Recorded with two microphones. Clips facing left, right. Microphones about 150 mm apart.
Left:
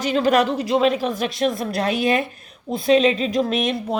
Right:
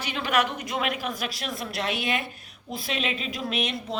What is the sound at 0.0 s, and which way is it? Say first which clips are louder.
A woman's voice: left 8 dB; 40° left (ahead or behind).